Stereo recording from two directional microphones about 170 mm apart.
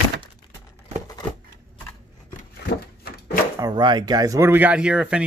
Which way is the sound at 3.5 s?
25° right (ahead or behind).